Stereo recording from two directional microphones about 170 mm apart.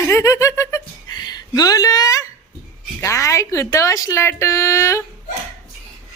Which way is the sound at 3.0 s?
15° left (ahead or behind).